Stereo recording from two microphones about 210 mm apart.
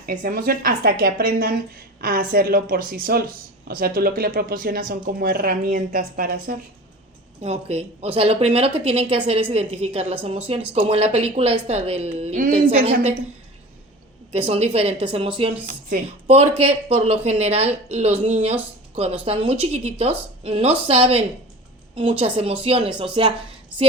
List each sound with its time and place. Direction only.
0.0 s speech: 40° right (ahead or behind)
7.4 s speech: 30° right (ahead or behind)
14.3 s speech: 30° right (ahead or behind)
22.4 s speech: 30° right (ahead or behind)
23.7 s speech: 5° right (ahead or behind)